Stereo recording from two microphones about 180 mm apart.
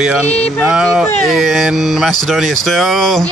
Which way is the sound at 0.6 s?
Centre (ahead or behind).